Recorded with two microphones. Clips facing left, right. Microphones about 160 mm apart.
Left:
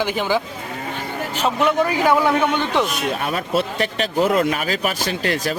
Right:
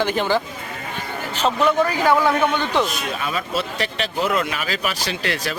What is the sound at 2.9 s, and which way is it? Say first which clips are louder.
Speech: left 3 dB; 55° left (ahead or behind).